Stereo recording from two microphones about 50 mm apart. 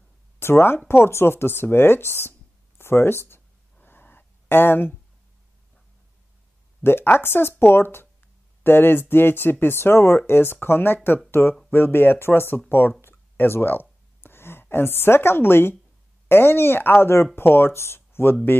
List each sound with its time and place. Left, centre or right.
0.4 s speech: left
3.8 s a sound: left
6.8 s speech: left